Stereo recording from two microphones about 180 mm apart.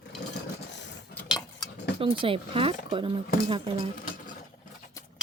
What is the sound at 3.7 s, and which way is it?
Speech, 55° left (ahead or behind).